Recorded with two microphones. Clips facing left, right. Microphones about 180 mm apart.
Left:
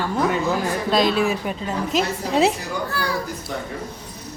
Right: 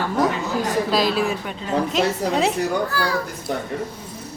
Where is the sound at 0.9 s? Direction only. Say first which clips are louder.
Left 5 dB; 5° right (ahead or behind).